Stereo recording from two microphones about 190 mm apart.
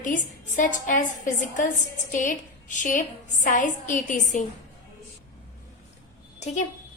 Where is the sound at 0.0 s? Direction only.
45° left (ahead or behind).